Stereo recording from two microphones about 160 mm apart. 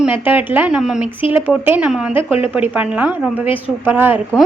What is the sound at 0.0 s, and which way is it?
A woman's voice, 10° right (ahead or behind).